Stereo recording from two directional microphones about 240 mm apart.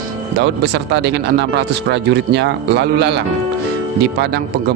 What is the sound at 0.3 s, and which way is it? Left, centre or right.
Speech, right.